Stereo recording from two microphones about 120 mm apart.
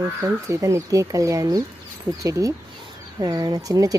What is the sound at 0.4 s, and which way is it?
Speech, 25° right (ahead or behind).